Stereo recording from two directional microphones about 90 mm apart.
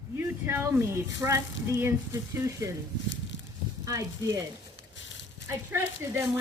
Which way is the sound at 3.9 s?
40° right (ahead or behind).